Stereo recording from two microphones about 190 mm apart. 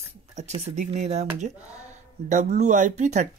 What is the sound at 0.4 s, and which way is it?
Speech, 40° right (ahead or behind).